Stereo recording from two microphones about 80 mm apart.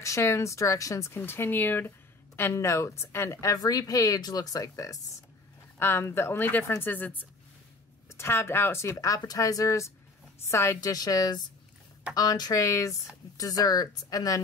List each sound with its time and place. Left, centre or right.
0.0 s speech: left
5.8 s speech: left
9.2 s speech: left
10.8 s speech: left